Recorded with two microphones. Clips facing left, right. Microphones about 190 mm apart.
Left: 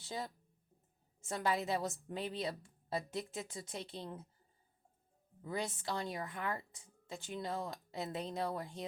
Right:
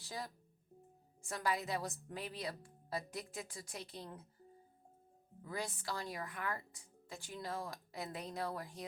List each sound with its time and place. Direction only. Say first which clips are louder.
0.0 s speech: left 3 dB; 25° left (ahead or behind)
5.4 s speech: left 3 dB; 25° left (ahead or behind)